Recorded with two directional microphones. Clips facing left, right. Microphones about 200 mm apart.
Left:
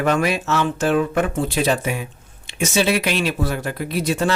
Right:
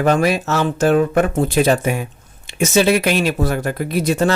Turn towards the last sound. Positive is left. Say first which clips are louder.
# right 4 dB
turn(degrees=-45)  # may be behind; listen again after turning